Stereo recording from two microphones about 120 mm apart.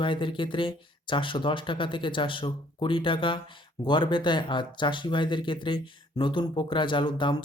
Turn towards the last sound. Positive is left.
turn(degrees=40)  # may be behind; listen again after turning